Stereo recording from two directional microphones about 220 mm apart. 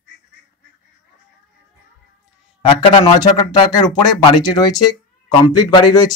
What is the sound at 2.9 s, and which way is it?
Speech, 20° left (ahead or behind).